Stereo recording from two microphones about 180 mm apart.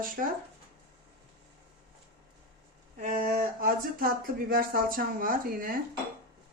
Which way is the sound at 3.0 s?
50° right (ahead or behind).